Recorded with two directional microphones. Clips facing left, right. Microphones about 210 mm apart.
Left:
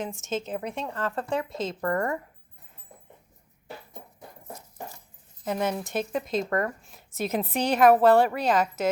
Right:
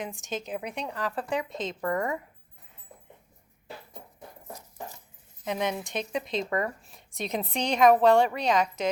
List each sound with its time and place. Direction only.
0.0 s speech: centre (ahead or behind)
1.8 s a woman's voice: 15° right (ahead or behind)
5.5 s speech: 5° left (ahead or behind)